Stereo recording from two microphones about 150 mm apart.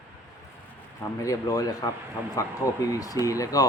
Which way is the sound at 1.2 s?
25° left (ahead or behind).